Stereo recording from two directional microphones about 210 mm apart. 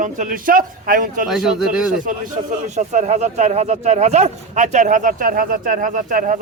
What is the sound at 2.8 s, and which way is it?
Speech, 35° right (ahead or behind).